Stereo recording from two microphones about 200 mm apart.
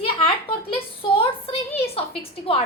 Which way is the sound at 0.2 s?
25° left (ahead or behind).